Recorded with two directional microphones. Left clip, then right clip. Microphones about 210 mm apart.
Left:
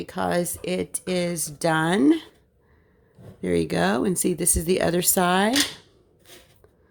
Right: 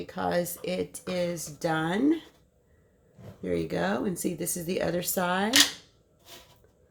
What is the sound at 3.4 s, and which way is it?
Speech, 40° left (ahead or behind).